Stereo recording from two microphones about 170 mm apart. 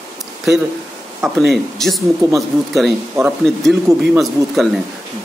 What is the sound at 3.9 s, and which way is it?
Speech, 15° right (ahead or behind).